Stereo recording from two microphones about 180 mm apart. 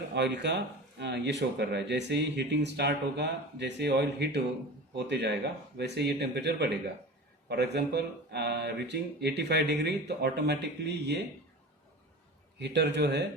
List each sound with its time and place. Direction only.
0.1 s speech: 75° right (ahead or behind)
12.5 s speech: 70° right (ahead or behind)